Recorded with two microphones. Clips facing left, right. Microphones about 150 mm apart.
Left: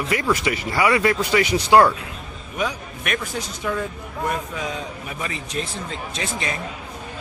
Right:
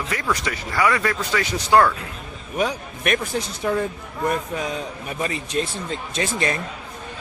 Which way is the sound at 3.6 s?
40° right (ahead or behind).